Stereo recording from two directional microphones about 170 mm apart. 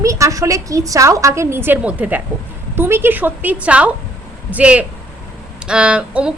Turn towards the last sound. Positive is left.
turn(degrees=-5)  # may be behind; listen again after turning